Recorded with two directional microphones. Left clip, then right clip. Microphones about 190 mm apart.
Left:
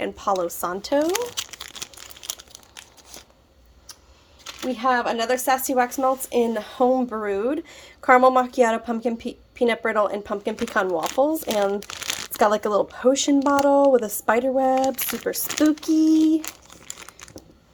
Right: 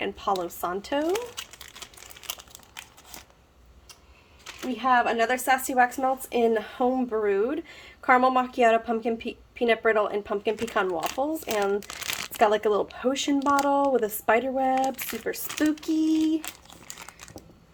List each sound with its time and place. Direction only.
0.0 s speech: 25° left (ahead or behind)
1.0 s crumpling: 50° left (ahead or behind)
2.2 s crumpling: 5° left (ahead or behind)
4.8 s speech: 30° left (ahead or behind)
12.4 s speech: 30° left (ahead or behind)
16.4 s crumpling: centre (ahead or behind)